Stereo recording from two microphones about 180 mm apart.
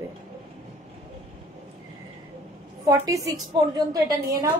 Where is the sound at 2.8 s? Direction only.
20° right (ahead or behind).